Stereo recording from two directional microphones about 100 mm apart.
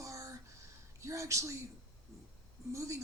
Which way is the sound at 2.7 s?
30° right (ahead or behind).